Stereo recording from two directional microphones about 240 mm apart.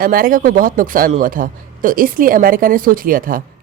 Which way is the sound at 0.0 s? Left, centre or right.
Right.